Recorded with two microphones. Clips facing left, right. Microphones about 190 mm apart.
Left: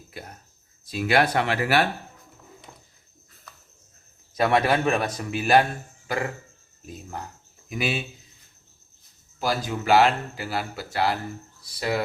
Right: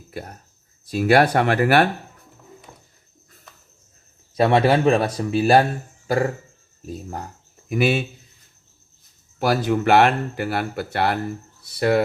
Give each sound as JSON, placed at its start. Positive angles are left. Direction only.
{"t": 0.1, "sound": "speech", "side_deg": -40}
{"t": 4.4, "sound": "speech", "side_deg": -30}
{"t": 7.7, "sound": "speech", "side_deg": -55}
{"t": 9.4, "sound": "speech", "side_deg": -65}